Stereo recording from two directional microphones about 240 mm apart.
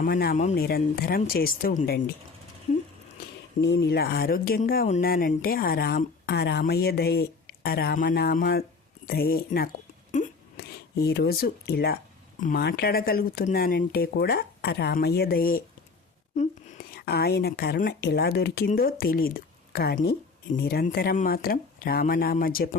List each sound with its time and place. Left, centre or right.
0.0 s speech: left
3.6 s speech: left
10.1 s a sound: left
12.4 s speech: left
16.9 s speech: left